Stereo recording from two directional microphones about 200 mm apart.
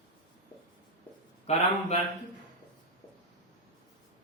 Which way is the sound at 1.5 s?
35° left (ahead or behind).